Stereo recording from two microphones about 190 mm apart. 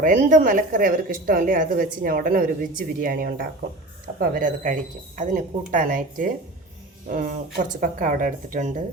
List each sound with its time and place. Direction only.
0.0 s a woman's voice: 45° right (ahead or behind)